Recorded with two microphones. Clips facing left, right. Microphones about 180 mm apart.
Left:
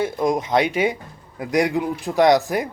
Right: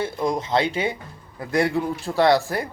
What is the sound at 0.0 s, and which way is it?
Speech, 15° left (ahead or behind).